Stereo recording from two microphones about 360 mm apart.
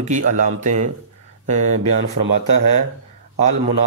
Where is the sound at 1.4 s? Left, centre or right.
Centre.